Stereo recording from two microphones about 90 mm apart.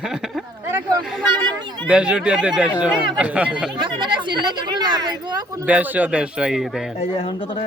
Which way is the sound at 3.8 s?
60° right (ahead or behind).